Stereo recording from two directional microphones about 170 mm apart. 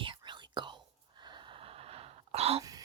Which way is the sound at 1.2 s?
25° right (ahead or behind).